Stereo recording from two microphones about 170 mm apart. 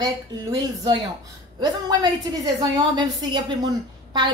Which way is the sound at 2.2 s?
25° right (ahead or behind).